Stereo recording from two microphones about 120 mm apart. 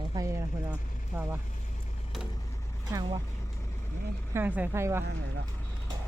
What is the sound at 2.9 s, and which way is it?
Speech, 30° right (ahead or behind).